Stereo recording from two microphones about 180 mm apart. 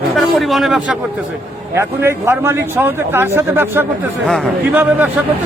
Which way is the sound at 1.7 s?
15° right (ahead or behind).